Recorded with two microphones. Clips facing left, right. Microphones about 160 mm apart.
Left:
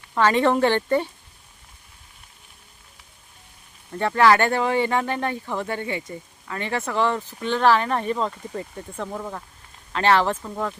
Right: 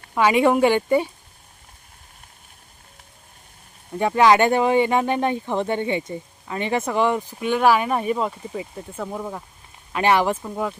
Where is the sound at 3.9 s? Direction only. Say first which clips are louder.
Right 2 dB; 15° right (ahead or behind).